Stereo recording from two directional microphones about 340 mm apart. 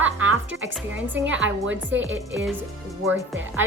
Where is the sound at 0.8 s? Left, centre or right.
Centre.